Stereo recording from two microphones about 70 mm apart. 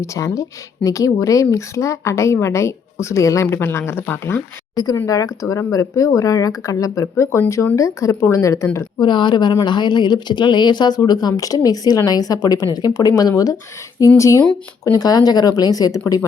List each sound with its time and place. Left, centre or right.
0.0 s speech: left
3.4 s speech: left
4.7 s speech: left
5.0 s speech: left
7.8 s speech: left
9.0 s speech: left
14.0 s speech: left
14.8 s speech: left